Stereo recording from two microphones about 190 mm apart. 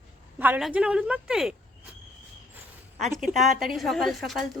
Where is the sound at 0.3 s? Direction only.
10° right (ahead or behind).